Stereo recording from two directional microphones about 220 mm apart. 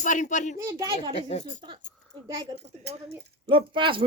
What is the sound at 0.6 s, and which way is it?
Speech, 15° right (ahead or behind).